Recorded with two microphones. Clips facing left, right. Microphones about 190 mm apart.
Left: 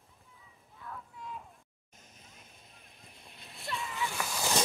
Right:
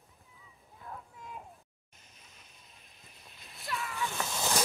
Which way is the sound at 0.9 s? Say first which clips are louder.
Even; 30° right (ahead or behind).